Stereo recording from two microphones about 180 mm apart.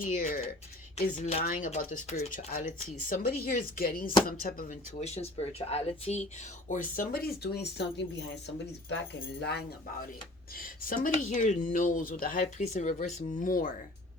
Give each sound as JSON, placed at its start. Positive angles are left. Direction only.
{"t": 0.0, "sound": "speech", "side_deg": 45}
{"t": 6.7, "sound": "speech", "side_deg": 50}